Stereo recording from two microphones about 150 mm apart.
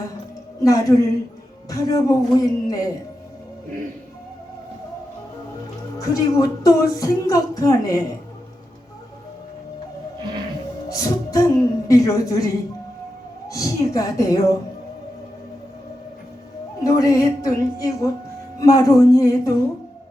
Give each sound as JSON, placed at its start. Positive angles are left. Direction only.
{"t": 0.6, "sound": "speech", "side_deg": 25}
{"t": 6.0, "sound": "speech", "side_deg": 20}
{"t": 10.8, "sound": "speech", "side_deg": 20}
{"t": 13.5, "sound": "speech", "side_deg": 25}
{"t": 16.8, "sound": "speech", "side_deg": 20}